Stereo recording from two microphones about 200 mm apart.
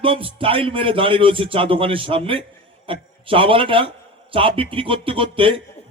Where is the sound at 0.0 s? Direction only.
25° right (ahead or behind).